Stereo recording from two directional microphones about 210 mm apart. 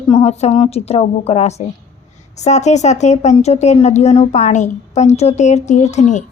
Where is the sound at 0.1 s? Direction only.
30° left (ahead or behind).